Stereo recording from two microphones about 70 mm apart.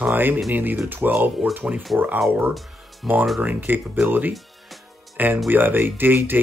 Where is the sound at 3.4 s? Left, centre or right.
Right.